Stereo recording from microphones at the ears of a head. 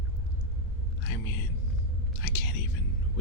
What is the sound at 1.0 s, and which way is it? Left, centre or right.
Speech, left.